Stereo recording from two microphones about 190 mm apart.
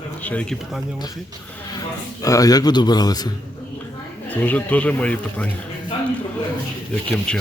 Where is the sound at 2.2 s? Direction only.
20° left (ahead or behind).